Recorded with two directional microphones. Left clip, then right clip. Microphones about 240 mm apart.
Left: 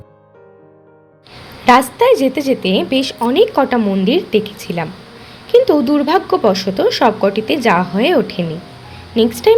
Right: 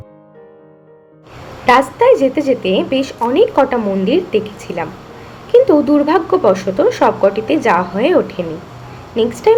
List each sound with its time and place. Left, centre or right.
1.6 s a woman's voice: left